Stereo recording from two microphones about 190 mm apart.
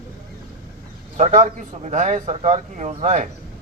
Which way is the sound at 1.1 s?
40° right (ahead or behind).